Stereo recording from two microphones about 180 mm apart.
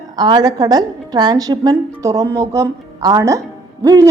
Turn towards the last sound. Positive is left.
turn(degrees=-20)  # may be behind; listen again after turning